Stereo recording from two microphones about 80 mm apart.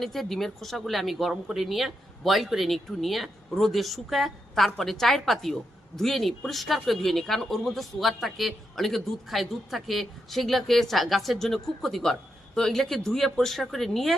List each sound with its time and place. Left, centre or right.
0.0 s speech: centre